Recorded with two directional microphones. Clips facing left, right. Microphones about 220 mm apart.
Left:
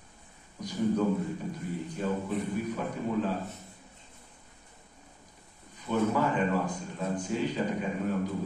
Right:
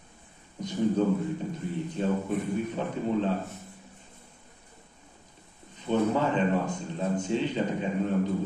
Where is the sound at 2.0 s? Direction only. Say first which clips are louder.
Right 3 dB; 25° right (ahead or behind).